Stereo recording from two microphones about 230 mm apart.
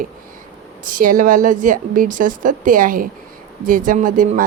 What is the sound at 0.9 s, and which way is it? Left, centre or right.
A woman's voice, right.